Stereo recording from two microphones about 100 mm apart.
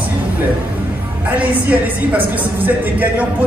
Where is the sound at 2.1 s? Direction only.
15° right (ahead or behind).